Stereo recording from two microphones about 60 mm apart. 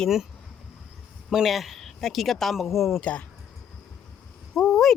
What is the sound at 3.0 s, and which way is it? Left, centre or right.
Speech, centre.